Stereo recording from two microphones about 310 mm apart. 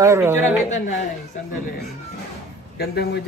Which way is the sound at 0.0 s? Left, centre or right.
Centre.